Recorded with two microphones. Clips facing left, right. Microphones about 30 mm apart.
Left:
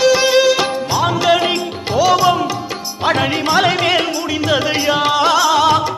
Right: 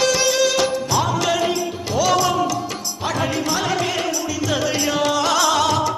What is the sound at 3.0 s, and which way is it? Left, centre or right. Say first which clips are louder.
Music: left 7 dB; left.